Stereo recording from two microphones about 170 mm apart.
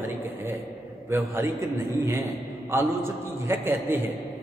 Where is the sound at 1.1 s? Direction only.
15° right (ahead or behind).